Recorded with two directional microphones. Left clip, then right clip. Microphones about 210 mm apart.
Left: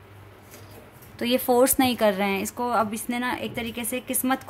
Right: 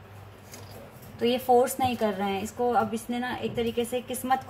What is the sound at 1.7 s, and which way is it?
Speech, 50° left (ahead or behind).